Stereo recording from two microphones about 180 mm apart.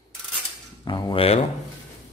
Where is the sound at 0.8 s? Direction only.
30° left (ahead or behind).